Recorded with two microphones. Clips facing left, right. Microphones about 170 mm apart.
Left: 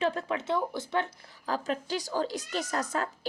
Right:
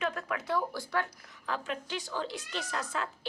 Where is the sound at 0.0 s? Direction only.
30° left (ahead or behind).